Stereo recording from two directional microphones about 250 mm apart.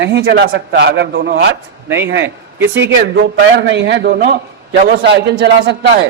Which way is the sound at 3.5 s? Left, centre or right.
Right.